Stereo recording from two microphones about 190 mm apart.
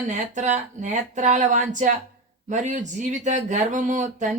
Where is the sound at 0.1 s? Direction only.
40° right (ahead or behind).